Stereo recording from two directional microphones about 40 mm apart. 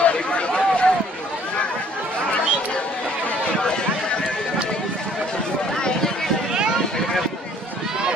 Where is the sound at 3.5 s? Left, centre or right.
Centre.